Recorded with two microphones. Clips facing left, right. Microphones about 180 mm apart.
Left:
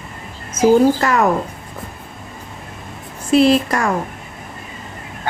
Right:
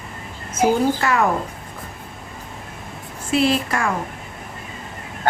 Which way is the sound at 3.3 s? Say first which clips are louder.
Left 6 dB; 40° left (ahead or behind).